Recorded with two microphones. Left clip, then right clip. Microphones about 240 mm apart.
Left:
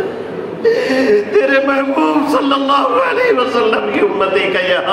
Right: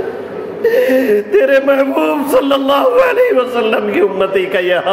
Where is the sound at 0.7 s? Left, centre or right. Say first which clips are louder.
Right 2 dB; right.